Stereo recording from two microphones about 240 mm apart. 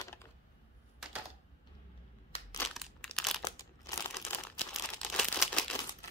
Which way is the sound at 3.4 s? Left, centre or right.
Centre.